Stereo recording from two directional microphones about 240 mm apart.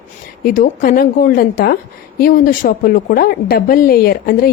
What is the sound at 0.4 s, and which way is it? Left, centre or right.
A woman's voice, left.